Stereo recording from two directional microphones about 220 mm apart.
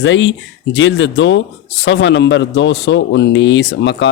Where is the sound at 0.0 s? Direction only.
55° left (ahead or behind).